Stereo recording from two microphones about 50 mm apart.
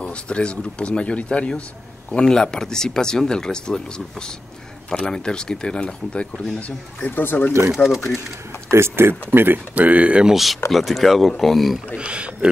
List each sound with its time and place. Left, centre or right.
0.0 s speech: left
2.0 s speech: centre
4.8 s speech: centre
7.0 s speech: left
7.7 s speech: centre
8.6 s speech: right
9.8 s speech: right
10.2 s speech: centre
12.0 s a man's voice: right